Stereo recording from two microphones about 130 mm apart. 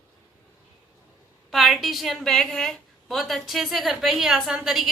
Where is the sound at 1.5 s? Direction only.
Centre (ahead or behind).